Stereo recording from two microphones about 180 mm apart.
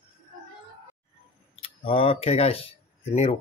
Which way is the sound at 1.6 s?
30° left (ahead or behind).